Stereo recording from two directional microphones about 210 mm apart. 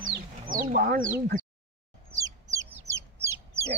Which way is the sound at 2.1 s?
15° right (ahead or behind).